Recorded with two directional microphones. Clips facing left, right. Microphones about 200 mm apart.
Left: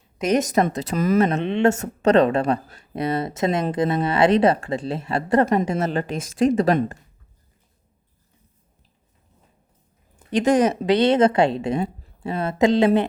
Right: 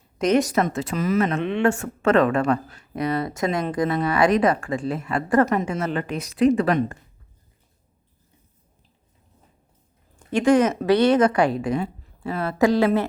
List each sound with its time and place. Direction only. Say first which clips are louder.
0.3 s speech: left 1 dB; 20° left (ahead or behind)
0.6 s speech: left 2 dB; 40° left (ahead or behind)
1.4 s speech: left 2 dB; 25° left (ahead or behind)
1.7 s speech: left 2 dB; 40° left (ahead or behind)
3.0 s a woman's voice: left 1 dB; 25° left (ahead or behind); by 6.9 s 40° left (ahead or behind)
10.3 s speech: even; 20° left (ahead or behind)